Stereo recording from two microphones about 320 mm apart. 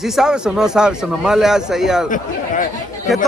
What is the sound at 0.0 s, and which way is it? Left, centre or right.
Speech, centre.